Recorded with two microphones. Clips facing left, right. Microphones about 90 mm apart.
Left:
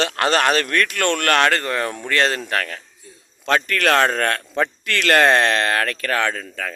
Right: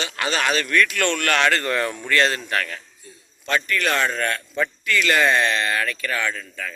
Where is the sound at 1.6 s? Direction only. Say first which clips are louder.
Even; 30° left (ahead or behind).